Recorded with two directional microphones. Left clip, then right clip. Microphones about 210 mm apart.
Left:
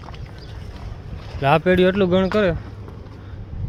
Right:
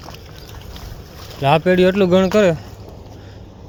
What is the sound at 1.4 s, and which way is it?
Speech, 10° right (ahead or behind).